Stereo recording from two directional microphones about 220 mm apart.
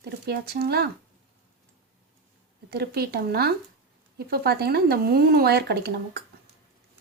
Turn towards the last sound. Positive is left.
turn(degrees=-50)  # may be behind; listen again after turning